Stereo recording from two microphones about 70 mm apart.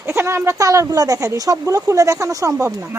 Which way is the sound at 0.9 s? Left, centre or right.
Right.